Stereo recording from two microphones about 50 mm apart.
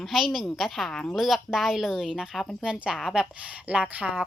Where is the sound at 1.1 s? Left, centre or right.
Centre.